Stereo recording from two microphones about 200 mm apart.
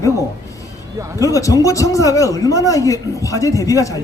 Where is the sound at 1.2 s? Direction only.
15° left (ahead or behind).